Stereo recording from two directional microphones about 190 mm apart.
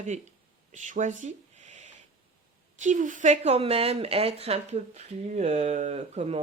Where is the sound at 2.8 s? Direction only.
40° right (ahead or behind).